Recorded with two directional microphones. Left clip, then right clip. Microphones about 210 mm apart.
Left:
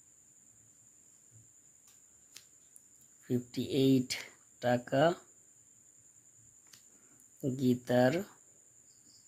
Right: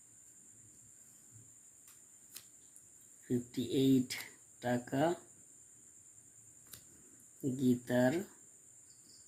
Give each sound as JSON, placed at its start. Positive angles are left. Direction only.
{"t": 2.3, "sound": "a sound", "side_deg": 0}
{"t": 3.2, "sound": "speech", "side_deg": 45}
{"t": 7.5, "sound": "speech", "side_deg": 45}